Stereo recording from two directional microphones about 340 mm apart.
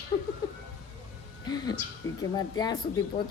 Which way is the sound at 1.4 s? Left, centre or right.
Centre.